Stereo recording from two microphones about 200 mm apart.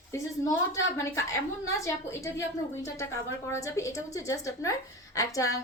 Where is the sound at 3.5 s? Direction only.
15° left (ahead or behind).